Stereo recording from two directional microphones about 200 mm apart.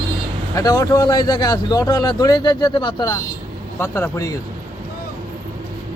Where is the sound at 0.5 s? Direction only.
20° left (ahead or behind).